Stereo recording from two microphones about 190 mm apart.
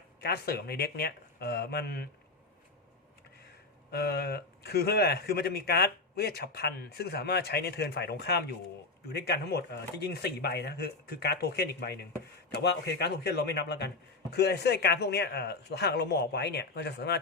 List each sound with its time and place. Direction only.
0.2 s a man's voice: 55° left (ahead or behind)
3.9 s a man's voice: 55° left (ahead or behind)